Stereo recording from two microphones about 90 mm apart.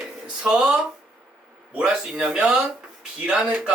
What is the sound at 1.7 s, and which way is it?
Speech, 5° right (ahead or behind).